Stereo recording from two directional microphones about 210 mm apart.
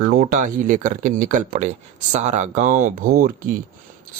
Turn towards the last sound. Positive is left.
turn(degrees=-40)  # may be behind; listen again after turning